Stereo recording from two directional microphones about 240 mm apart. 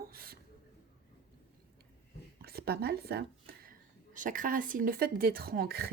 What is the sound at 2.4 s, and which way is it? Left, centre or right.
Speech, right.